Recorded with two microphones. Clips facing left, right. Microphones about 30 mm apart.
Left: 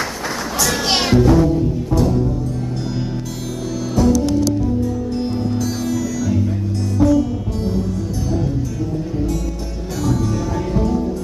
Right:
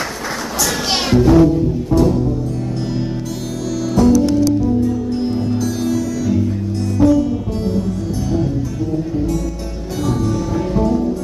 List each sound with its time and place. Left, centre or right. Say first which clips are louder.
0.9 s music: right 3 dB; centre
3.9 s music: right 3 dB; centre
5.9 s music: right 2 dB; right
7.0 s music: right 2 dB; centre
10.3 s music: right 2 dB; centre